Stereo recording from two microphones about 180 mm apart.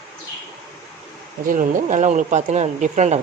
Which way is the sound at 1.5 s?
45° right (ahead or behind).